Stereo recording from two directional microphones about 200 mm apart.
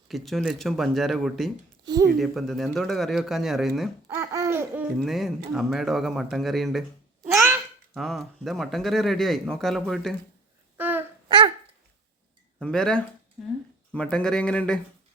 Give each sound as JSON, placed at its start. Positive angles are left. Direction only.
{"t": 0.1, "sound": "speech", "side_deg": 0}
{"t": 1.8, "sound": "a sound", "side_deg": -20}
{"t": 2.1, "sound": "speech", "side_deg": 0}
{"t": 4.1, "sound": "laughter", "side_deg": -15}
{"t": 4.9, "sound": "speech", "side_deg": 0}
{"t": 7.9, "sound": "speech", "side_deg": 0}
{"t": 10.8, "sound": "babbling", "side_deg": -10}
{"t": 11.3, "sound": "dog", "side_deg": -25}
{"t": 12.5, "sound": "speech", "side_deg": 5}